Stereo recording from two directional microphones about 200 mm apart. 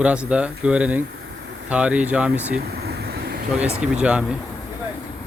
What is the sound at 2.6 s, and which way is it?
Vehicle, 55° right (ahead or behind).